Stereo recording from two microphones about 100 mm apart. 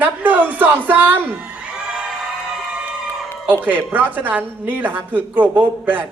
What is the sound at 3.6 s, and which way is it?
A woman's voice, 15° right (ahead or behind).